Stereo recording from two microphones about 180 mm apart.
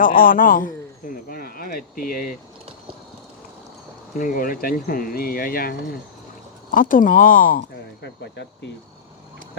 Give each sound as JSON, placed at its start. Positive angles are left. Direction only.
{"t": 0.0, "sound": "speech", "side_deg": 50}
{"t": 4.2, "sound": "speech", "side_deg": 50}
{"t": 8.0, "sound": "speech", "side_deg": 70}